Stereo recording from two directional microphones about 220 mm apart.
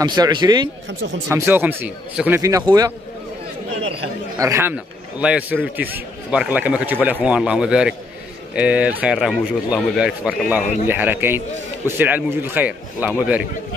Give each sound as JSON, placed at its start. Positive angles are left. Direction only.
{"t": 0.0, "sound": "a man's voice", "side_deg": -20}
{"t": 1.3, "sound": "a man's voice", "side_deg": -10}
{"t": 4.4, "sound": "a man's voice", "side_deg": -10}